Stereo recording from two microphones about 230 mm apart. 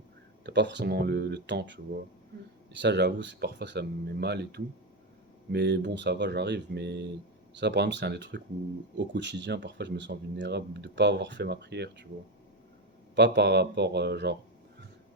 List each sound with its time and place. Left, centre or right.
0.4 s speech: right
2.8 s speech: right
13.1 s speech: right